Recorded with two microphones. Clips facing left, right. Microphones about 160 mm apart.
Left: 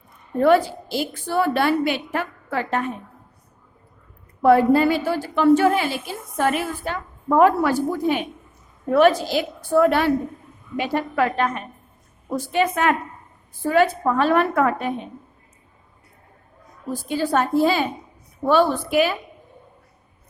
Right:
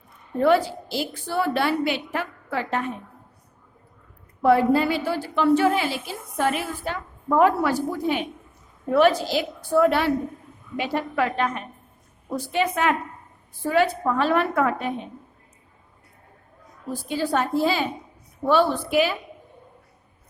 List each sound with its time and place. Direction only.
0.4 s a woman's voice: 50° left (ahead or behind)
4.4 s a woman's voice: 50° left (ahead or behind)
16.9 s a woman's voice: 50° left (ahead or behind)